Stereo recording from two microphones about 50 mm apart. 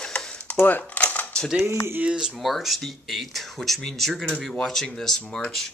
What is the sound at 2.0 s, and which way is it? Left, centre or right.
Speech, centre.